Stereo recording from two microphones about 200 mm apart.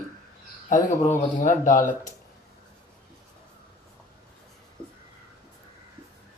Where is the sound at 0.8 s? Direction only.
35° left (ahead or behind).